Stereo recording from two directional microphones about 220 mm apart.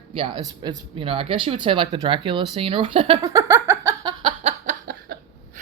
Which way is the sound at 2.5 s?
25° right (ahead or behind).